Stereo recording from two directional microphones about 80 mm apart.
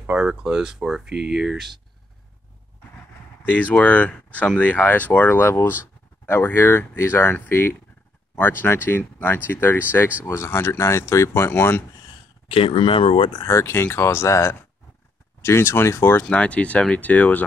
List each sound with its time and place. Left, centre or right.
0.0 s speech: centre
3.4 s speech: centre
12.7 s speech: left
13.5 s speech: left
16.3 s speech: centre